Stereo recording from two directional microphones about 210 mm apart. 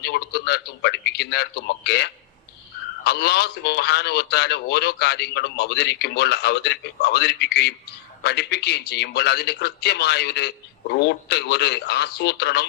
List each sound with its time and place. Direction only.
0.0 s a man's voice: 50° left (ahead or behind)